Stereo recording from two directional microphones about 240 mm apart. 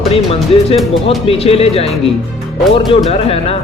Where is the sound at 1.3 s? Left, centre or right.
Left.